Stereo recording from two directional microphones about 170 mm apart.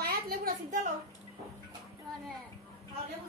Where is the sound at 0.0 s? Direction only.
60° right (ahead or behind).